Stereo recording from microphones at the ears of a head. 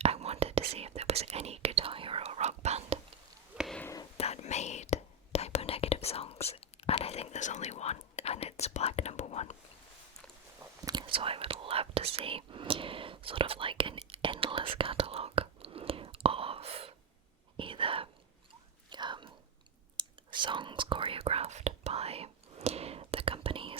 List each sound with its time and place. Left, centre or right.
0.0 s whispering: right
4.2 s whispering: left
11.0 s speech: right
17.6 s whispering: right
20.0 s whispering: right